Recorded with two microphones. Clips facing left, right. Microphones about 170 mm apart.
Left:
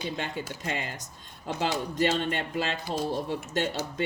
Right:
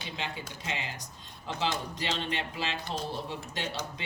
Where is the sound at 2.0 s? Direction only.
50° left (ahead or behind).